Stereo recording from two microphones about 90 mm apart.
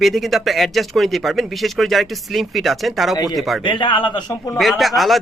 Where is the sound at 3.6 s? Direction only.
65° left (ahead or behind).